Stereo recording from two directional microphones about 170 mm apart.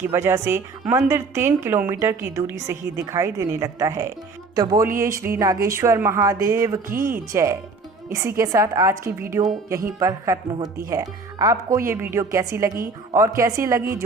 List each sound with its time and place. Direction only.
0.0 s speech: 15° right (ahead or behind)